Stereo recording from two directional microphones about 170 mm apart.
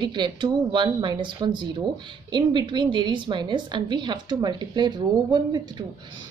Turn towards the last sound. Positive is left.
turn(degrees=-25)  # may be behind; listen again after turning